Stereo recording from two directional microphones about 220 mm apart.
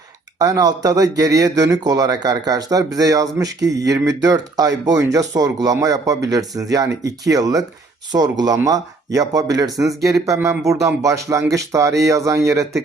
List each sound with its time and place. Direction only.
0.3 s speech: 15° right (ahead or behind)